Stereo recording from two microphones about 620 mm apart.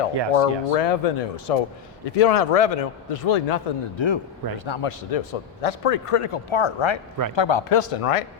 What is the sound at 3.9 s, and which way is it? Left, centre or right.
A man's voice, left.